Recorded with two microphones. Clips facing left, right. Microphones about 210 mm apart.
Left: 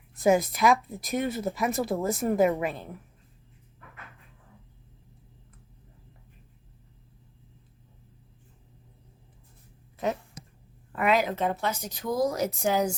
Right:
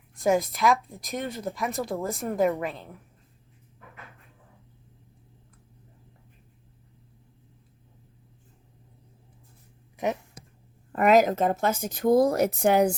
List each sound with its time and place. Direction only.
0.2 s speech: centre (ahead or behind)
10.9 s speech: 45° right (ahead or behind); by 12.9 s 65° right (ahead or behind)